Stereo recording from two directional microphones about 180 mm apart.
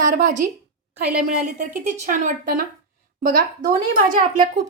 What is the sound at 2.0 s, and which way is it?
Speech, 45° right (ahead or behind).